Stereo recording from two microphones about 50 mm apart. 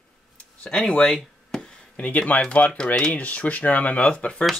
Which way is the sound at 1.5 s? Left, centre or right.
Centre.